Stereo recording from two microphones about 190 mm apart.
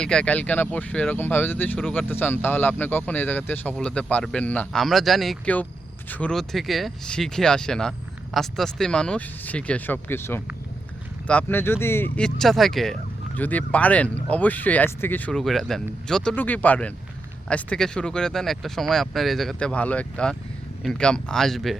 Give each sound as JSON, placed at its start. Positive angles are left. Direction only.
{"t": 0.0, "sound": "speech", "side_deg": 5}